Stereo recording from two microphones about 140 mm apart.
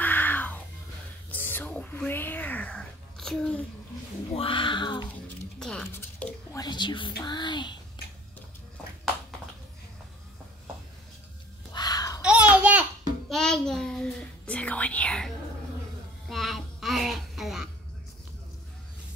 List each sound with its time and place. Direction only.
0.0 s a sound: 15° left (ahead or behind)
4.3 s speech: 40° left (ahead or behind)
5.6 s speech: 5° left (ahead or behind)
5.9 s speech: 20° left (ahead or behind)
6.7 s speech: 35° left (ahead or behind)
11.7 s a sound: 30° left (ahead or behind)
12.2 s a sound: 10° right (ahead or behind)
13.3 s whispering: 5° left (ahead or behind)
16.3 s music: centre (ahead or behind)